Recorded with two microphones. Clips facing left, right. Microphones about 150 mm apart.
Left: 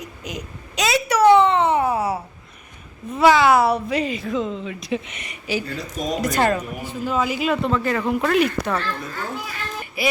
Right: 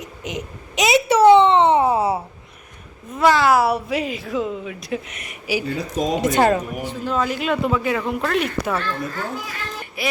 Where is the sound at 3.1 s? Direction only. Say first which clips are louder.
Left 1 dB; centre (ahead or behind).